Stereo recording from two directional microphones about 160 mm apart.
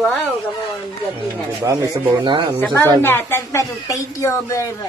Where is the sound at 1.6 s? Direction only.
20° right (ahead or behind).